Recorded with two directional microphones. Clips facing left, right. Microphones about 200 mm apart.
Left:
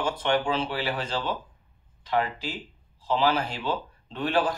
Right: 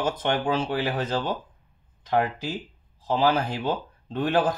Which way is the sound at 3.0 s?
45° right (ahead or behind).